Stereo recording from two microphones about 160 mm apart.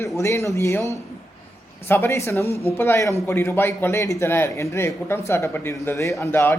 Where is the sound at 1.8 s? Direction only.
15° left (ahead or behind).